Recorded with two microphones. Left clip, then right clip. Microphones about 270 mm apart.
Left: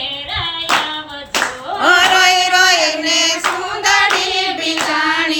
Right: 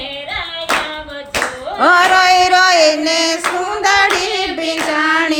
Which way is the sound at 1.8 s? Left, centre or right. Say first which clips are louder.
Right 1 dB; right.